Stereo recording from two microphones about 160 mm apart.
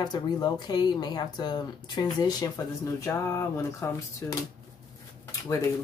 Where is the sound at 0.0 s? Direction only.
25° left (ahead or behind).